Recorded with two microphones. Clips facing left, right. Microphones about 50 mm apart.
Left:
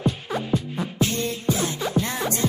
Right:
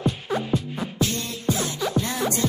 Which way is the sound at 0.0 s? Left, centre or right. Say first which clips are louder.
Even; centre.